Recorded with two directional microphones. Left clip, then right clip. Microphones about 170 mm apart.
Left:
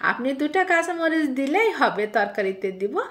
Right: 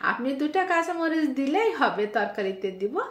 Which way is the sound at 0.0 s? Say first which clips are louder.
Left 3 dB; 30° left (ahead or behind).